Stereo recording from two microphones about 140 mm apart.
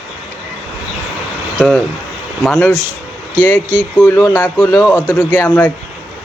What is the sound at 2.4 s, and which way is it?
Speech, 5° left (ahead or behind).